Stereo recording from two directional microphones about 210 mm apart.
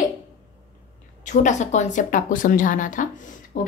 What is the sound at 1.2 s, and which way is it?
A woman's voice, 35° left (ahead or behind).